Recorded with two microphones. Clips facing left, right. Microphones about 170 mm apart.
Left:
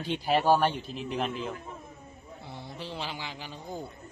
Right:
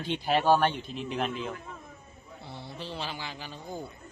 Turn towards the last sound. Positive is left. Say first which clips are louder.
# even
turn(degrees=15)  # may be behind; listen again after turning